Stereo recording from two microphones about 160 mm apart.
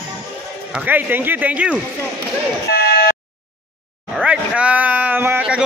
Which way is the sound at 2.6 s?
85° left.